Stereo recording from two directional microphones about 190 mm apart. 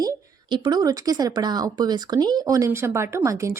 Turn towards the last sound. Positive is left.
turn(degrees=-15)  # may be behind; listen again after turning